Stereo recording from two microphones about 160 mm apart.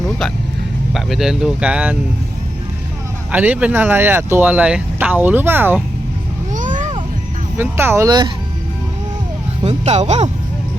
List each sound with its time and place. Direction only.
0.9 s speech: centre (ahead or behind)
3.3 s speech: 10° right (ahead or behind)
6.5 s a sound: 55° right (ahead or behind)
7.5 s speech: 15° right (ahead or behind)
9.6 s speech: 45° right (ahead or behind)